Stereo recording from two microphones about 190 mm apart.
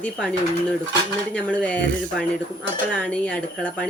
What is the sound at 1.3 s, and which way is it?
Speech, 5° left (ahead or behind).